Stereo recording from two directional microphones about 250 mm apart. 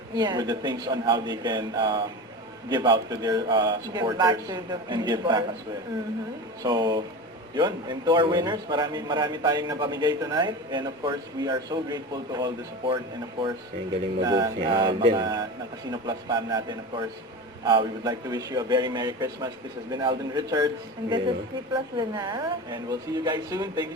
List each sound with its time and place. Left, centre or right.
0.2 s a man's voice: centre
6.6 s a man's voice: centre
14.2 s a man's voice: centre
21.7 s a man's voice: centre